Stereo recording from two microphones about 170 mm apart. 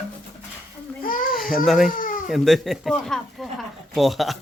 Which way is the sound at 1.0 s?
55° left (ahead or behind).